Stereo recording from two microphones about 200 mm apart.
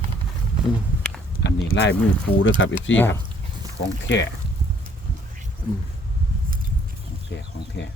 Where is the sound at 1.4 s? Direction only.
65° left (ahead or behind).